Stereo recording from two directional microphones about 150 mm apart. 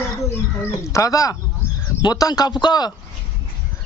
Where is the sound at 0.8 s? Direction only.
20° left (ahead or behind).